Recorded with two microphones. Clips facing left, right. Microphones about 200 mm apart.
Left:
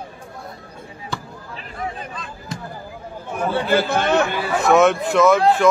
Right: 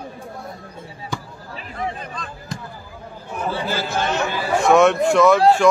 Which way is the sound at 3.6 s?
60° left (ahead or behind).